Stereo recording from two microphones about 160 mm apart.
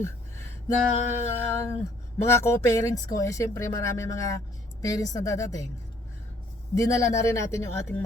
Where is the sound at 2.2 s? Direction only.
15° left (ahead or behind).